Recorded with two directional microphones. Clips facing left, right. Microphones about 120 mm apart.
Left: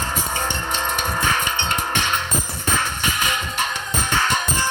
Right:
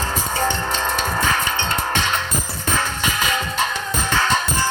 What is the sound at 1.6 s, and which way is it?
Music, 15° left (ahead or behind).